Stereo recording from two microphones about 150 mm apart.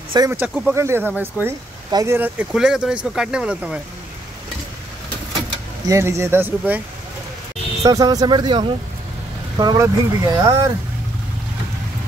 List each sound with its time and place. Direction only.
0.3 s speech: 15° right (ahead or behind)
1.9 s speech: 25° right (ahead or behind)
2.1 s speech: 10° right (ahead or behind)
5.9 s speech: 20° right (ahead or behind)
7.8 s speech: 25° right (ahead or behind)